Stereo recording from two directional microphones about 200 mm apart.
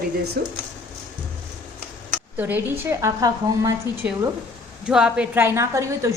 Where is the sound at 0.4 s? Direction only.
50° right (ahead or behind).